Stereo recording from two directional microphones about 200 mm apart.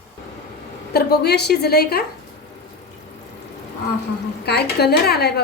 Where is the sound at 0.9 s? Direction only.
50° left (ahead or behind).